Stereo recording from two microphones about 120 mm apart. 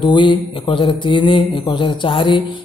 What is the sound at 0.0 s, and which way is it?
Speech, 40° left (ahead or behind).